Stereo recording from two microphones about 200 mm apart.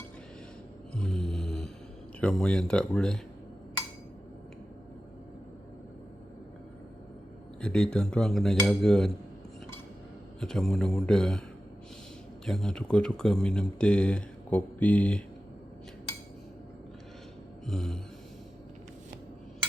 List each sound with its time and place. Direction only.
0.9 s snoring: 5° left (ahead or behind)
2.2 s speech: 5° left (ahead or behind)
7.6 s speech: 5° left (ahead or behind)
10.4 s speech: 5° left (ahead or behind)
12.5 s speech: centre (ahead or behind)
17.7 s speech: 5° left (ahead or behind)